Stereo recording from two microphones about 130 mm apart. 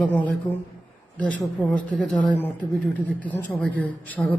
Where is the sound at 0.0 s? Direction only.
10° left (ahead or behind).